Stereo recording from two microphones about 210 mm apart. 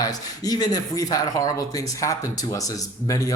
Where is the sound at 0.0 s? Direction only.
20° left (ahead or behind).